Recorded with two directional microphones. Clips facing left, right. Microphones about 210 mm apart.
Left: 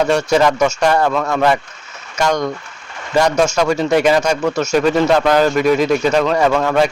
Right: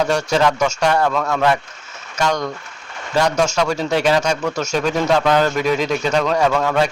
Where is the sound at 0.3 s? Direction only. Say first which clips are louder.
Left 3 dB; 10° left (ahead or behind).